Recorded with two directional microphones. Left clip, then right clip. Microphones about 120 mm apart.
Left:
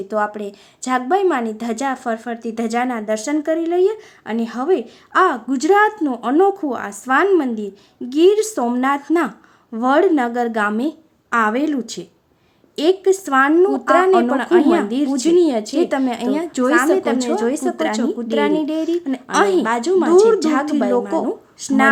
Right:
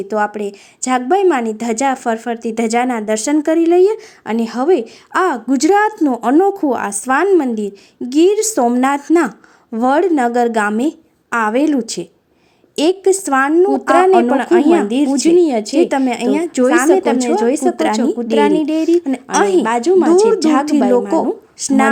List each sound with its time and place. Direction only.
0.1 s a woman's voice: 30° right (ahead or behind)
9.7 s a woman's voice: 40° right (ahead or behind)